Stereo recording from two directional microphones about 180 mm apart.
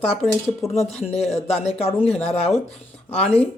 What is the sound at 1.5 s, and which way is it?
Speech, 35° left (ahead or behind).